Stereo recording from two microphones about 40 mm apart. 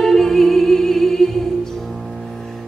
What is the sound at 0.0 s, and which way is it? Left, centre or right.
Music, centre.